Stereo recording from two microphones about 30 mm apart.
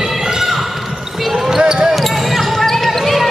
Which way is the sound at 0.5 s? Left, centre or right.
Centre.